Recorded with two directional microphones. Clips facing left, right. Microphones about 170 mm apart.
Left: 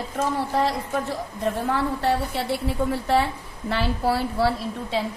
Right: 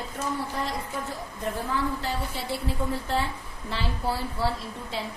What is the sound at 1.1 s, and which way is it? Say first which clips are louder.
A woman's voice: left 6 dB; 70° left (ahead or behind).